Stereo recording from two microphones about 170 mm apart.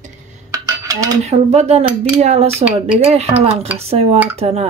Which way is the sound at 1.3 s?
40° right (ahead or behind).